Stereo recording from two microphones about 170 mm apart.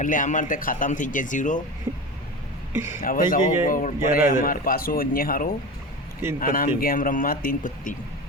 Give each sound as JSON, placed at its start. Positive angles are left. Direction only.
{"t": 0.0, "sound": "speech", "side_deg": 50}
{"t": 2.7, "sound": "a man's voice", "side_deg": -15}
{"t": 3.0, "sound": "speech", "side_deg": 55}